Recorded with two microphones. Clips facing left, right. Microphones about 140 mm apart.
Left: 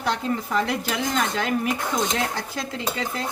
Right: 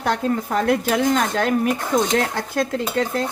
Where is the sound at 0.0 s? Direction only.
50° right (ahead or behind).